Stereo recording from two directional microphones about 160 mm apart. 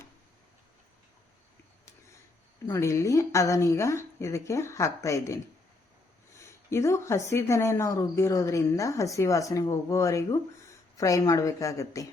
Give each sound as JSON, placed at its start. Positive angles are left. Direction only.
{"t": 2.6, "sound": "speech", "side_deg": 15}